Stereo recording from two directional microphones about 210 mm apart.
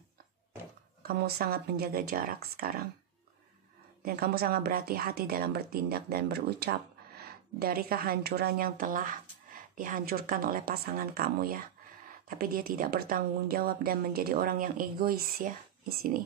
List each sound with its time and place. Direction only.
1.0 s speech: 45° right (ahead or behind)
4.0 s speech: 45° right (ahead or behind)